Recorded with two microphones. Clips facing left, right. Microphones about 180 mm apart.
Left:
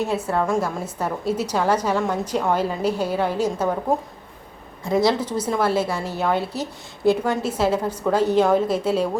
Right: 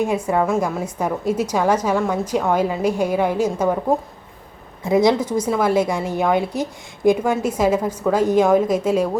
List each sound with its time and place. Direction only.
0.3 s a woman's voice: 10° right (ahead or behind)
4.9 s a woman's voice: 15° right (ahead or behind)